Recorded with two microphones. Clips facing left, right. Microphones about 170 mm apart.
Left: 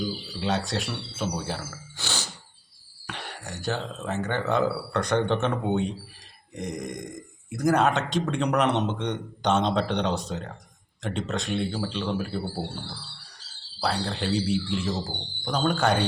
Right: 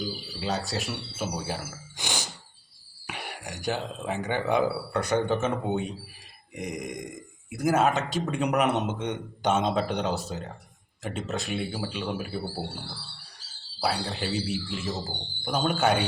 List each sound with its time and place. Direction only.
0.3 s speech: centre (ahead or behind)
13.8 s speech: 5° right (ahead or behind)